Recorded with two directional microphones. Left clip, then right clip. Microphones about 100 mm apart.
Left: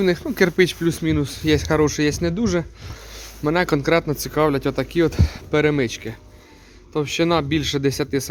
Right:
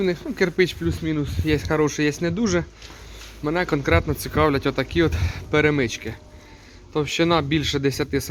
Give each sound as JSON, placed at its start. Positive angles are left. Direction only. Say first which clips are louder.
{"t": 0.0, "sound": "speech", "louder": "left 4 dB", "side_deg": 65}
{"t": 0.8, "sound": "speech", "louder": "left 4 dB", "side_deg": 90}
{"t": 1.5, "sound": "speech", "louder": "left 2 dB", "side_deg": 40}
{"t": 3.4, "sound": "speech", "louder": "left 3 dB", "side_deg": 60}
{"t": 3.8, "sound": "speech", "louder": "left 2 dB", "side_deg": 30}